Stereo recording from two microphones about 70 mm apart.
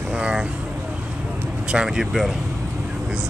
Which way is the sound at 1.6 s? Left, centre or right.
Centre.